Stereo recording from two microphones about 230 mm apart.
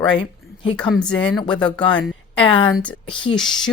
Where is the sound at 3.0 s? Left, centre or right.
Left.